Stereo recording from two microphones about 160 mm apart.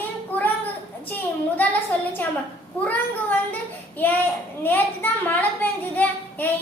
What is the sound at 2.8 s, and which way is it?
Speech, 10° left (ahead or behind).